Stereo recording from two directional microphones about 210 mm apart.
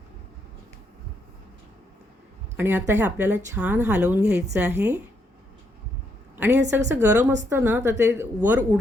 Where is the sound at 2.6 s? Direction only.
10° right (ahead or behind).